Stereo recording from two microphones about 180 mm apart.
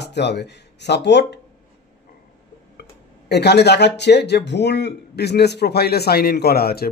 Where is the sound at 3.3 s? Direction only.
70° left (ahead or behind).